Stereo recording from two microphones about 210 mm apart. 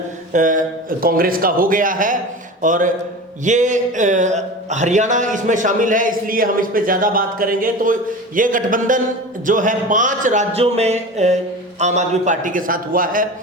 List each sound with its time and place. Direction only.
0.3 s speech: 40° right (ahead or behind)